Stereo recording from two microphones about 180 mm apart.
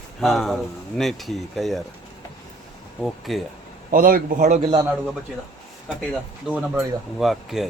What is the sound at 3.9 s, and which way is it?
Speech, 50° right (ahead or behind).